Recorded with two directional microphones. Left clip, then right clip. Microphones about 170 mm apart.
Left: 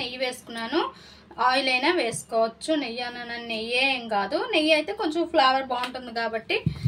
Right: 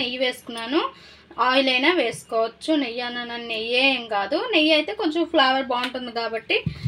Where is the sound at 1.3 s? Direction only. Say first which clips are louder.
Right 3 dB; 30° right (ahead or behind).